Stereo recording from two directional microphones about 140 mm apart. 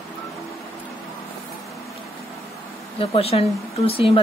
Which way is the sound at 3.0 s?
45° left (ahead or behind).